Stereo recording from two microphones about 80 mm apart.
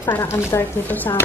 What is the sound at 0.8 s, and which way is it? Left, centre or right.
Speech, left.